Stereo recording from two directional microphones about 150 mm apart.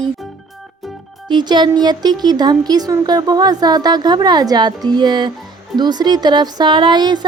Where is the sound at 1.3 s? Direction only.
30° right (ahead or behind).